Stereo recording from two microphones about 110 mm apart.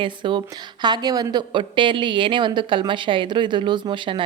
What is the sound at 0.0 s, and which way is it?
A woman's voice, 50° right (ahead or behind).